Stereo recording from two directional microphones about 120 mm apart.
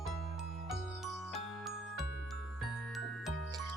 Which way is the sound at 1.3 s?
Centre (ahead or behind).